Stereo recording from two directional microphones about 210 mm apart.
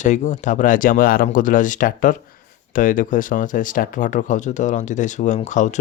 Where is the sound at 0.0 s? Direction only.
35° left (ahead or behind).